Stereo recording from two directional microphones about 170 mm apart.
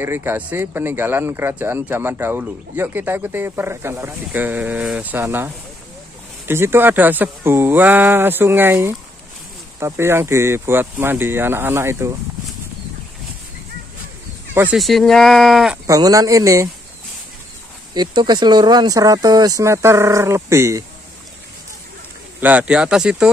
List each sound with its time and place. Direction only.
0.0 s speech: 15° right (ahead or behind)
14.5 s speech: 10° right (ahead or behind)
15.9 s speech: 20° right (ahead or behind)
17.9 s speech: 25° right (ahead or behind)
22.4 s speech: 10° right (ahead or behind)